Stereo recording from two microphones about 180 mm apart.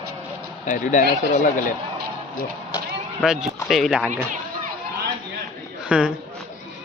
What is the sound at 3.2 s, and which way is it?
Speech, centre (ahead or behind).